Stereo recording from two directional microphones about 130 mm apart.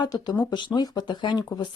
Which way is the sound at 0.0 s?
30° left (ahead or behind).